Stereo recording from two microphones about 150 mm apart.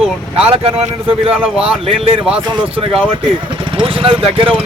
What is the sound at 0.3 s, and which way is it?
Speech, 40° right (ahead or behind).